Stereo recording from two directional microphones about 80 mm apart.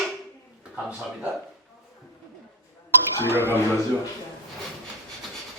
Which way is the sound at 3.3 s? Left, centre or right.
Right.